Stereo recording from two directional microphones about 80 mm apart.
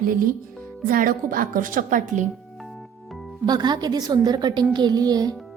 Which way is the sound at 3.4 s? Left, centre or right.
Right.